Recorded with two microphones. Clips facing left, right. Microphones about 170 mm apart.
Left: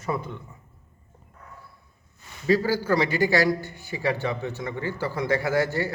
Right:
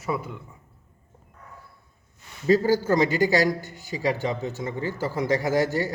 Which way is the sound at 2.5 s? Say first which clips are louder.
Right 2 dB; 20° right (ahead or behind).